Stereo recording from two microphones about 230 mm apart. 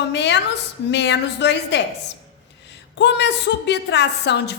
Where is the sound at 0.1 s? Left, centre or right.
Left.